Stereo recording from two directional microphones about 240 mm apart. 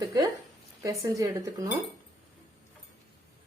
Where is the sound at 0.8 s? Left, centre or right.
Centre.